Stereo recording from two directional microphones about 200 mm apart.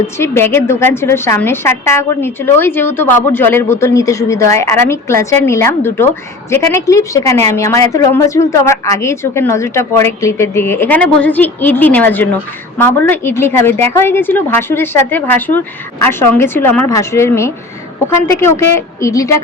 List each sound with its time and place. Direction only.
0.2 s a woman's voice: 10° left (ahead or behind)